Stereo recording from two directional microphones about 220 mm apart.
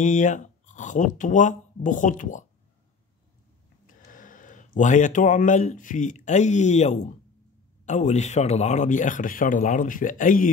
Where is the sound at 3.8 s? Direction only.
35° left (ahead or behind).